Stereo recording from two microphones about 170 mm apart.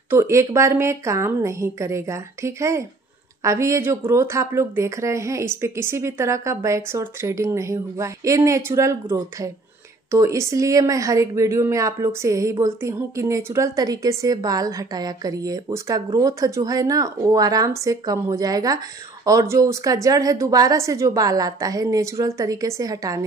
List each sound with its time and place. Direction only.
0.1 s speech: 15° right (ahead or behind)